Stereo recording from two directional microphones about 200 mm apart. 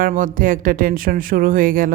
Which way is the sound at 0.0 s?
45° right (ahead or behind).